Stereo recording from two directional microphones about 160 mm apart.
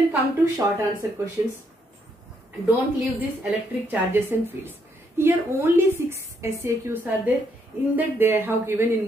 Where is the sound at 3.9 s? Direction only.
15° right (ahead or behind).